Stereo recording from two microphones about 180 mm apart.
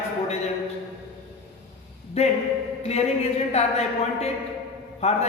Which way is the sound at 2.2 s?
35° left (ahead or behind).